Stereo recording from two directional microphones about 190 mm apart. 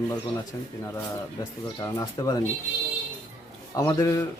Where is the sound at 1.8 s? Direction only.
15° left (ahead or behind).